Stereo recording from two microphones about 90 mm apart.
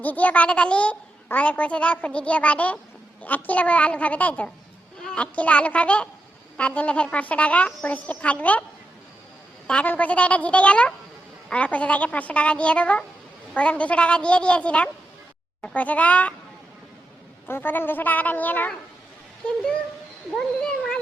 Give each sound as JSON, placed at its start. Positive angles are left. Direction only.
{"t": 0.0, "sound": "a child's voice", "side_deg": 20}
{"t": 9.6, "sound": "a child's voice", "side_deg": 15}
{"t": 17.5, "sound": "speech", "side_deg": 25}